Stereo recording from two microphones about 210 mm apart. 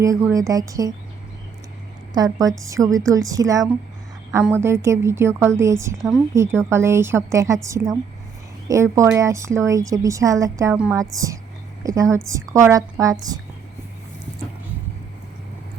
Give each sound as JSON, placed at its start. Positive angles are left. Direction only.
{"t": 0.0, "sound": "a woman's voice", "side_deg": -15}
{"t": 2.1, "sound": "a woman's voice", "side_deg": -20}
{"t": 6.0, "sound": "a woman's voice", "side_deg": 0}
{"t": 6.3, "sound": "a woman's voice", "side_deg": -15}